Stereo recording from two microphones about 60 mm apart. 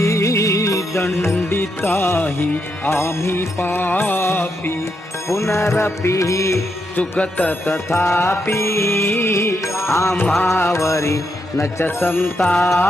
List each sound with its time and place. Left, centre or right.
0.0 s music: left
1.0 s music: left
5.3 s music: left
6.9 s music: left
7.9 s music: left
12.5 s music: centre